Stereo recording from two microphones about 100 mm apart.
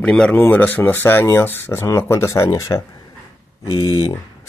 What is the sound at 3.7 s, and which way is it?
Speech, 60° left (ahead or behind).